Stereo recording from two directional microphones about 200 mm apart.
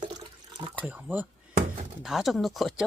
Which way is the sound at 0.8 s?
10° right (ahead or behind).